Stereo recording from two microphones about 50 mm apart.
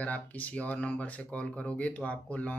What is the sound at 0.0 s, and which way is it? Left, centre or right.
Speech, left.